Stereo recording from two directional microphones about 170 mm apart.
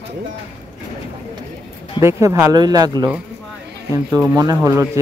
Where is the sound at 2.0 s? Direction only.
20° right (ahead or behind).